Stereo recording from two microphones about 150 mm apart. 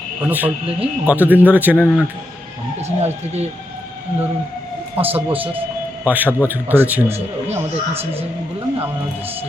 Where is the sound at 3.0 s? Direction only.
45° right (ahead or behind).